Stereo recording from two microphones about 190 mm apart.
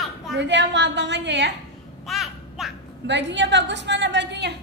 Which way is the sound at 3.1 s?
70° right (ahead or behind).